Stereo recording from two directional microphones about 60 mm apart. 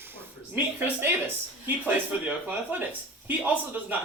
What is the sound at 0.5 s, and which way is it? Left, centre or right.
A woman's voice, right.